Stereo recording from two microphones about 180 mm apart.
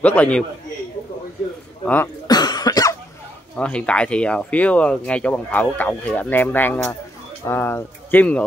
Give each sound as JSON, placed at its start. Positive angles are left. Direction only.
{"t": 0.0, "sound": "speech", "side_deg": 10}
{"t": 2.2, "sound": "cough", "side_deg": 20}
{"t": 3.5, "sound": "speech", "side_deg": 5}